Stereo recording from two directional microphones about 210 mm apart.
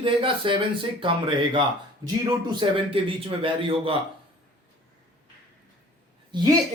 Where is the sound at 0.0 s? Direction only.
25° right (ahead or behind).